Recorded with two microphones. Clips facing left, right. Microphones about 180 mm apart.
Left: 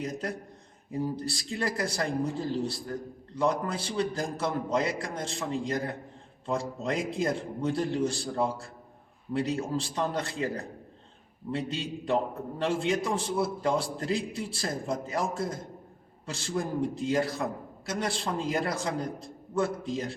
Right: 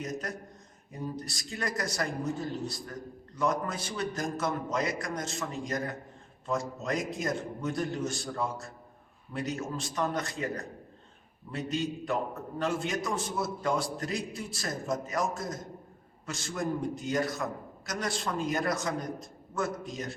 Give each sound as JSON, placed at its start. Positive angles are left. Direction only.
{"t": 0.0, "sound": "a man's voice", "side_deg": 30}
{"t": 12.0, "sound": "a man's voice", "side_deg": 30}